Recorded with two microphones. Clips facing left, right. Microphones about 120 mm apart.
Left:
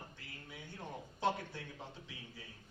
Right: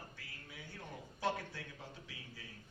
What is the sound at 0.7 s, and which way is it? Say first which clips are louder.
Speech: left 4 dB; 25° left (ahead or behind).